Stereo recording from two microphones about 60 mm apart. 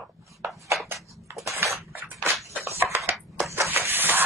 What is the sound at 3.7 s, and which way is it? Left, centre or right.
Shuffle, right.